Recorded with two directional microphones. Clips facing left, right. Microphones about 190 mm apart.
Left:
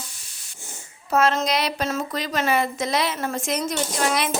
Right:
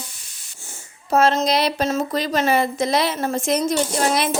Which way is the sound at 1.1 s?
30° right (ahead or behind).